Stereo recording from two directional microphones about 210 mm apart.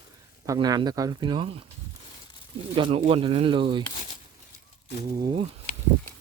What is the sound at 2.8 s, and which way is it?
Speech, 25° right (ahead or behind).